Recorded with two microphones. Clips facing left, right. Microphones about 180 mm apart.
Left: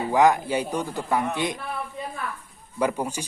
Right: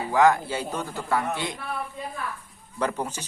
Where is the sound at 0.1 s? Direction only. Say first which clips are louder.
Left 1 dB; 15° left (ahead or behind).